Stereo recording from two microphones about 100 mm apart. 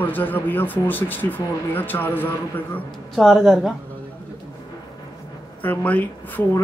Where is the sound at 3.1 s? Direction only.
5° left (ahead or behind).